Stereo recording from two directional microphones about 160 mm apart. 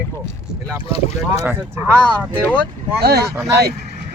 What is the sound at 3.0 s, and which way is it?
Speech, 80° right.